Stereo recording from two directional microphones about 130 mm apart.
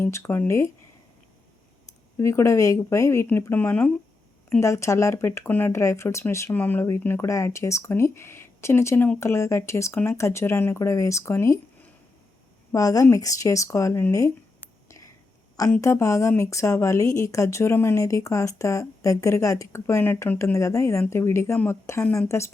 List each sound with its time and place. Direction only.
0.0 s speech: 20° left (ahead or behind)
2.1 s speech: 20° left (ahead or behind)
4.6 s speech: 25° left (ahead or behind)